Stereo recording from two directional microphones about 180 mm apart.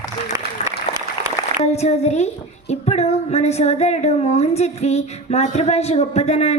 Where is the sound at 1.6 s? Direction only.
35° left (ahead or behind).